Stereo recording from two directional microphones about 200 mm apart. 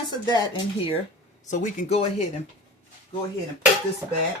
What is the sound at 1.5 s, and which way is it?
Speech, 35° left (ahead or behind).